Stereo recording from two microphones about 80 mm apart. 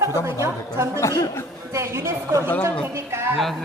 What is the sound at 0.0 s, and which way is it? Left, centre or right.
Speech, right.